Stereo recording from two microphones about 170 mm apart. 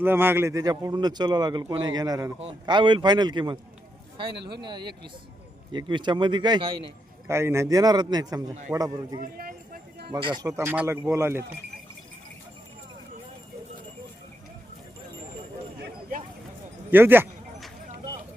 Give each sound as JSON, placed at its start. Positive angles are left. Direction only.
{"t": 0.0, "sound": "a man's voice", "side_deg": -10}
{"t": 4.4, "sound": "speech", "side_deg": -75}
{"t": 4.6, "sound": "a man's voice", "side_deg": -25}
{"t": 7.3, "sound": "a man's voice", "side_deg": -15}
{"t": 9.2, "sound": "speech", "side_deg": -55}
{"t": 10.1, "sound": "speech", "side_deg": -30}
{"t": 15.8, "sound": "a sound", "side_deg": -55}
{"t": 16.9, "sound": "speech", "side_deg": -10}